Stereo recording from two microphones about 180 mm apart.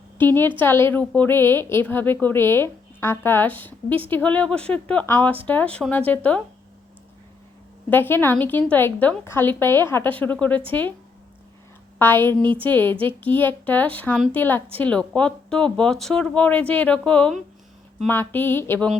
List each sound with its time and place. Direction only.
0.2 s a woman's voice: 10° left (ahead or behind)
7.9 s a woman's voice: 10° left (ahead or behind)
11.9 s a woman's voice: 10° left (ahead or behind)